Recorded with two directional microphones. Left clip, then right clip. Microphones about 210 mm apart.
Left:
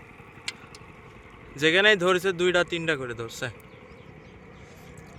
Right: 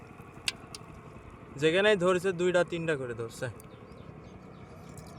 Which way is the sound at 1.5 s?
5° left (ahead or behind).